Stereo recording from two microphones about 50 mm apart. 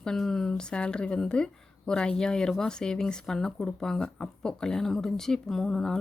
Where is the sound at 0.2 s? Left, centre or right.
Centre.